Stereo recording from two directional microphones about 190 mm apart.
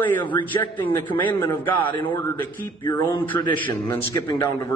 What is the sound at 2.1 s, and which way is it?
A man's voice, 10° left (ahead or behind).